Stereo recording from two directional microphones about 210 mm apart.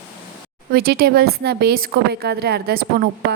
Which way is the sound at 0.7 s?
45° right (ahead or behind).